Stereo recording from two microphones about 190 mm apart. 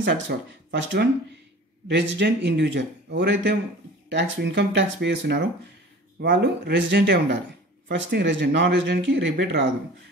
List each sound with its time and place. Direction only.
0.0 s speech: 65° right (ahead or behind)